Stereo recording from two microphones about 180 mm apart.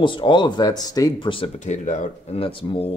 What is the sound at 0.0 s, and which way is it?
Speech, 25° left (ahead or behind).